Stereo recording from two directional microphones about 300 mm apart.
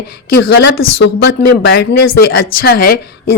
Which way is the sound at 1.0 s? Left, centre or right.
Left.